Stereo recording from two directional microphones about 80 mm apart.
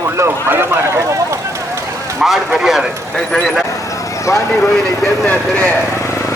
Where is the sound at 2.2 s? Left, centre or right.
Centre.